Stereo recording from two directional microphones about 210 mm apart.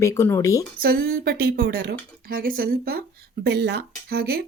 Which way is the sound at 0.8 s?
45° right (ahead or behind).